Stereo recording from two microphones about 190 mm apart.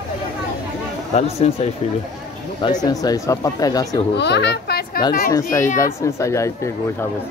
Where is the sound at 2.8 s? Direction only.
20° left (ahead or behind).